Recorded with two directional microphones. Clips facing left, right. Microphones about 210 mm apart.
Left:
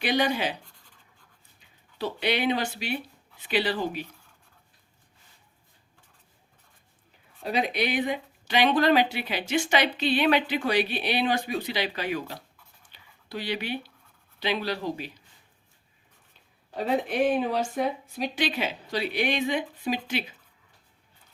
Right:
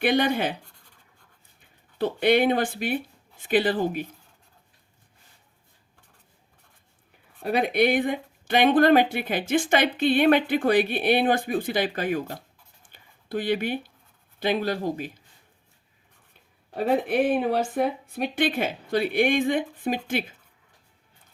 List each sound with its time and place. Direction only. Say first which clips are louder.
0.0 s speech: right 3 dB; 55° right (ahead or behind)
2.0 s speech: right 7 dB; 50° right (ahead or behind)
7.3 s speech: right 5 dB; 55° right (ahead or behind)
12.8 s a sound: right 1 dB; 50° right (ahead or behind)
14.3 s speech: right 4 dB; 50° right (ahead or behind)
16.7 s speech: right 3 dB; 55° right (ahead or behind)